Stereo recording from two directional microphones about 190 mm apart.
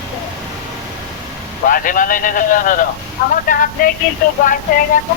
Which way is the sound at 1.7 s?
45° left (ahead or behind).